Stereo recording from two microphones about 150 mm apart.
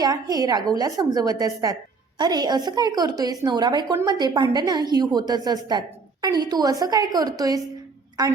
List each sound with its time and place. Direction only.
0.0 s a woman's voice: 25° right (ahead or behind)